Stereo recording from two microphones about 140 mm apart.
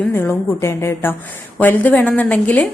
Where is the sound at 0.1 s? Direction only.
15° left (ahead or behind).